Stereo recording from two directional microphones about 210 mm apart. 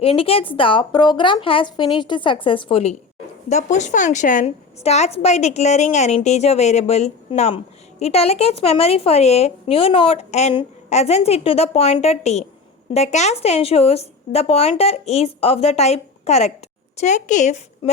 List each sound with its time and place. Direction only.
0.0 s a woman's voice: 25° left (ahead or behind)